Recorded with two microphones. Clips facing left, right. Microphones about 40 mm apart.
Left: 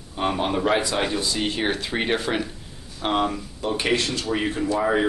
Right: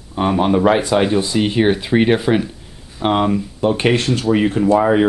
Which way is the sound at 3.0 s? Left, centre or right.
Right.